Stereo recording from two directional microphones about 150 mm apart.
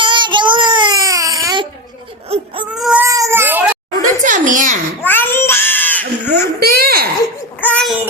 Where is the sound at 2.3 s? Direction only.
35° right (ahead or behind).